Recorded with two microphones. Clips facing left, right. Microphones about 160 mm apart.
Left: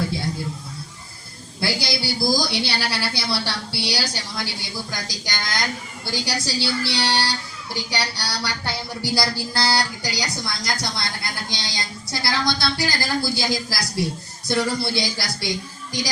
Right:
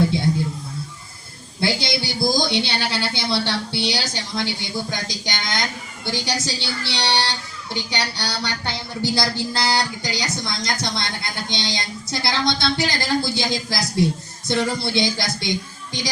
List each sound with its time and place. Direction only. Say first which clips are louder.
1.6 s speech: right 2 dB; 20° right (ahead or behind)